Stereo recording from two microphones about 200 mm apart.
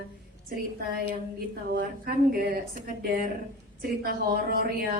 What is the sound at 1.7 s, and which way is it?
A woman's voice, 50° right (ahead or behind).